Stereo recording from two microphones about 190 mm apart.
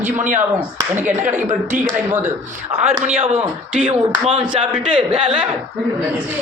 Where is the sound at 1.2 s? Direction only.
40° right (ahead or behind).